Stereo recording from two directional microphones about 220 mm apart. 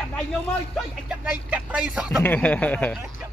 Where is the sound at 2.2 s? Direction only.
10° left (ahead or behind).